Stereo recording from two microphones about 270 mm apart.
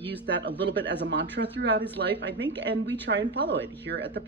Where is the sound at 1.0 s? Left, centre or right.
Right.